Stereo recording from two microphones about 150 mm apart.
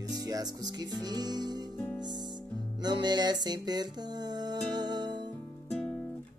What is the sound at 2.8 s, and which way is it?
Music, 30° right (ahead or behind).